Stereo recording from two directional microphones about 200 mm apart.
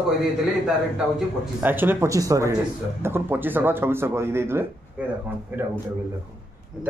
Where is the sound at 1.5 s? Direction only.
10° right (ahead or behind).